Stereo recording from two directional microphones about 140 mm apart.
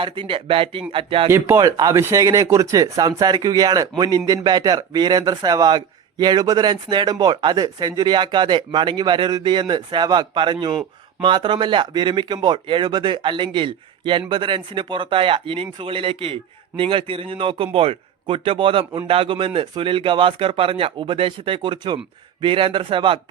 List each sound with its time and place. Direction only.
0.0 s speech: 40° right (ahead or behind)
1.3 s speech: 20° right (ahead or behind); by 23.2 s 35° right (ahead or behind)